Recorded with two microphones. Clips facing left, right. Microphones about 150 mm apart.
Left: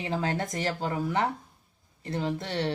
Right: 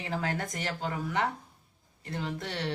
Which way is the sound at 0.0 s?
25° left (ahead or behind).